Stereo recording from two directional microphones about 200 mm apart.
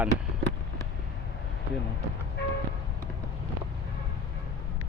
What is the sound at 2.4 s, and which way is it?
Vehicle, 55° left (ahead or behind).